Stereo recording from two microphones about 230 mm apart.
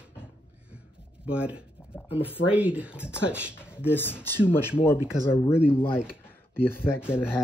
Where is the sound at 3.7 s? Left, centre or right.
Centre.